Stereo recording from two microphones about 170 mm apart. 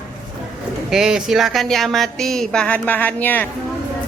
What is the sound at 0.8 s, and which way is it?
Speech, 5° right (ahead or behind).